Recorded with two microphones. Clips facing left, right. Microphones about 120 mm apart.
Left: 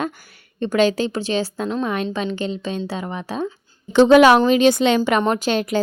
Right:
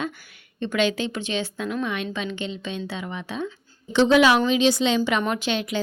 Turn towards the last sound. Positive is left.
turn(degrees=45)  # may be behind; listen again after turning